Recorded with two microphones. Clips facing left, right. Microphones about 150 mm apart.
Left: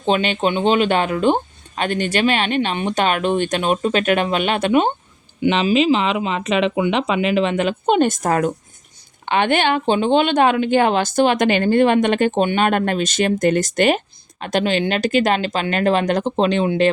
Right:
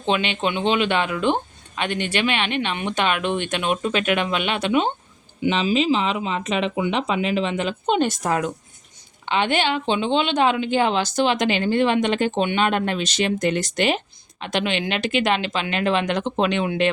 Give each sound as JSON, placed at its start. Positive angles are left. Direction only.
{"t": 0.0, "sound": "speech", "side_deg": 40}
{"t": 5.4, "sound": "speech", "side_deg": 70}